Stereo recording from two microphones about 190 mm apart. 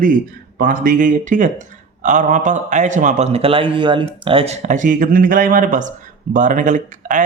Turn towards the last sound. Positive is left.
turn(degrees=-40)  # may be behind; listen again after turning